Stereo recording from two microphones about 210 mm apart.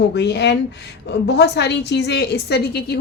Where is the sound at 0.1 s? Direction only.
55° left (ahead or behind).